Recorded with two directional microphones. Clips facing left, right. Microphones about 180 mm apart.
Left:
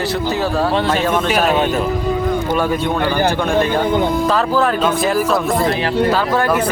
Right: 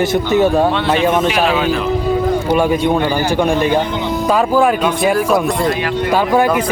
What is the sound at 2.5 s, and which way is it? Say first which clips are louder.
A man's voice: right 4 dB; 15° right (ahead or behind).